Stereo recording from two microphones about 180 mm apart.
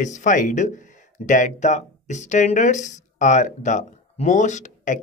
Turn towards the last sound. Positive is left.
turn(degrees=45)  # may be behind; listen again after turning